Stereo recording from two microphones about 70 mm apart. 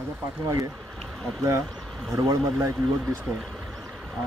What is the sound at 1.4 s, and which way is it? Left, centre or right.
Speech, right.